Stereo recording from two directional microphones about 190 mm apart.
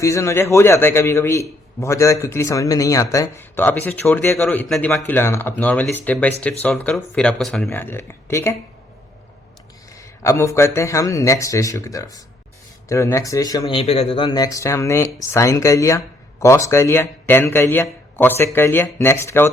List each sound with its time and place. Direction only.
0.0 s speech: 15° left (ahead or behind)
4.4 s a man's voice: centre (ahead or behind)
9.9 s speech: 15° left (ahead or behind)